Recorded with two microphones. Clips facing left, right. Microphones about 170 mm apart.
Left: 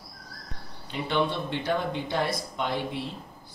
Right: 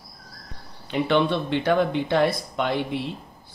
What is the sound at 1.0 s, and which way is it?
Speech, 70° right (ahead or behind).